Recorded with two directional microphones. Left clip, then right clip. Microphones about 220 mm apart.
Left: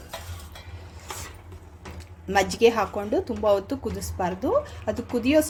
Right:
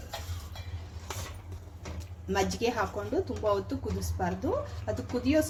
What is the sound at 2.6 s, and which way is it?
Speech, 35° left (ahead or behind).